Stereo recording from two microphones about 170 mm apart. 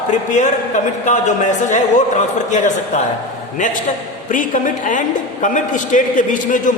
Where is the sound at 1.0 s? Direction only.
45° left (ahead or behind).